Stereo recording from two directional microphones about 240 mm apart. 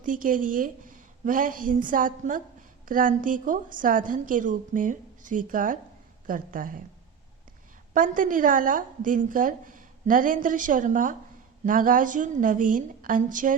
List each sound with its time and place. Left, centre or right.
0.0 s a woman's voice: right
7.9 s a woman's voice: right